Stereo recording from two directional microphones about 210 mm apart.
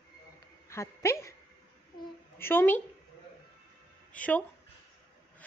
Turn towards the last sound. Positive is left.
turn(degrees=5)  # may be behind; listen again after turning